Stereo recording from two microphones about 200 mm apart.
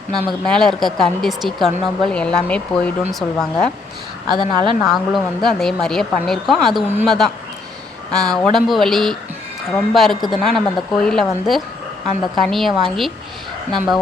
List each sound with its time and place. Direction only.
0.1 s speech: centre (ahead or behind)
4.3 s a woman's voice: 25° right (ahead or behind)
4.8 s speech: centre (ahead or behind)